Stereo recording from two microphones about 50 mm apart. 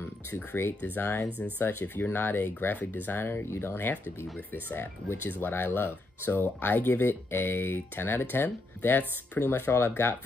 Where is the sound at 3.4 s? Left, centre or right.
Left.